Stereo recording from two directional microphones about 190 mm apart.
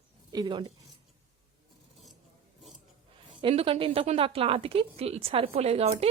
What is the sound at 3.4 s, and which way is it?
A woman's voice, 30° right (ahead or behind).